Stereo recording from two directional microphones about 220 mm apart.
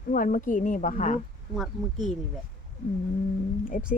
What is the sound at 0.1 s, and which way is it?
Speech, 40° left (ahead or behind).